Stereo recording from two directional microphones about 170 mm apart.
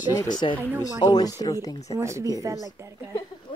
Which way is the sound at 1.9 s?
15° right (ahead or behind).